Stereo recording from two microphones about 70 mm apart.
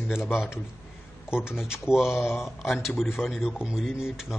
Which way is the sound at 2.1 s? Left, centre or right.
Left.